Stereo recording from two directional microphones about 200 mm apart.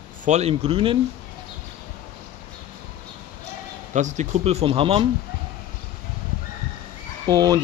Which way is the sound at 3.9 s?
35° right (ahead or behind).